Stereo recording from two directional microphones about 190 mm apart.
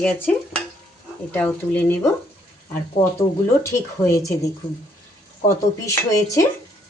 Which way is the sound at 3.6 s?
15° left (ahead or behind).